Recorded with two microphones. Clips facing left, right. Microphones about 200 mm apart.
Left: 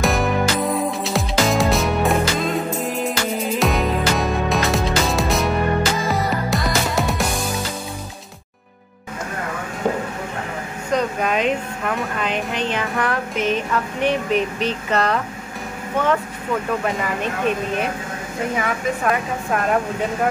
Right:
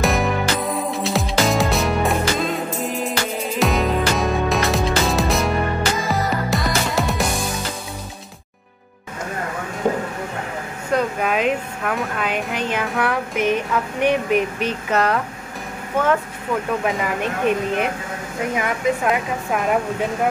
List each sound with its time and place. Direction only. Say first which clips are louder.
0.0 s music: left 1 dB; centre (ahead or behind)
10.9 s speech: even; 5° right (ahead or behind)
16.8 s speech: right 1 dB; 15° right (ahead or behind)